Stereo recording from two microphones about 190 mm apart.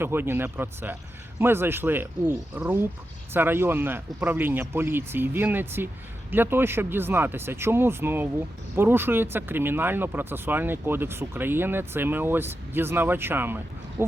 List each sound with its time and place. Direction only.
0.0 s speech: 10° right (ahead or behind)